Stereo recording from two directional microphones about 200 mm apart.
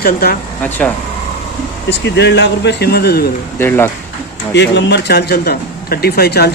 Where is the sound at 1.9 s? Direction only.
60° left (ahead or behind).